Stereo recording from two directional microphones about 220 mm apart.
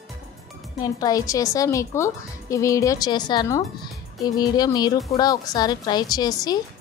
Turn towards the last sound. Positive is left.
turn(degrees=20)  # may be behind; listen again after turning